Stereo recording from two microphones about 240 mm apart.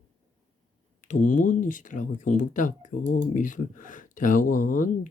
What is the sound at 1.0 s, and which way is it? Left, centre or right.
Speech, left.